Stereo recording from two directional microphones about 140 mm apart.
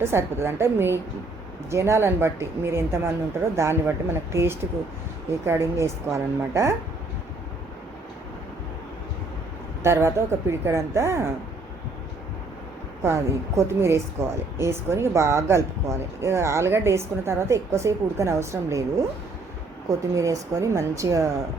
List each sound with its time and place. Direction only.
0.0 s a woman's voice: 20° right (ahead or behind)
9.8 s speech: 20° right (ahead or behind)
13.0 s speech: 20° right (ahead or behind)